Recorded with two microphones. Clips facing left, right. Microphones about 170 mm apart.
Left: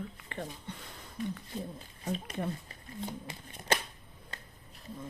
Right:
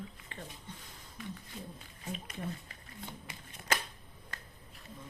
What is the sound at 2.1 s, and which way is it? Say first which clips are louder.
Speech: left 3 dB; 35° left (ahead or behind).